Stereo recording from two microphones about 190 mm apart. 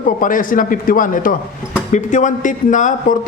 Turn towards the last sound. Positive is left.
turn(degrees=45)  # may be behind; listen again after turning